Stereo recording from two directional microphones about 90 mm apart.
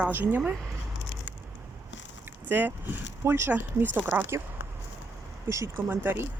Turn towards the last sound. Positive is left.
turn(degrees=-25)  # may be behind; listen again after turning